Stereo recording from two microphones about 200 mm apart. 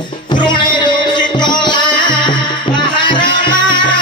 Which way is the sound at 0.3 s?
20° left (ahead or behind).